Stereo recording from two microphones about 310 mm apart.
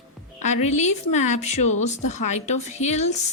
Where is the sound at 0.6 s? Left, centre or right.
Left.